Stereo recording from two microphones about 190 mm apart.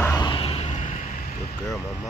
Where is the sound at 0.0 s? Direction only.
20° left (ahead or behind); by 1.3 s 40° left (ahead or behind).